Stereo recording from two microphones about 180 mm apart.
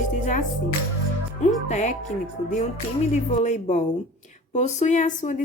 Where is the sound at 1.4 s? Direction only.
40° left (ahead or behind).